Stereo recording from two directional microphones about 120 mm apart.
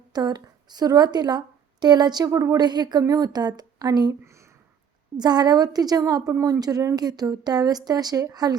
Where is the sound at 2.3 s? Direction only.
25° right (ahead or behind).